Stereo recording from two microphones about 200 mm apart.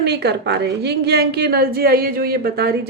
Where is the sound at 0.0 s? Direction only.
55° right (ahead or behind).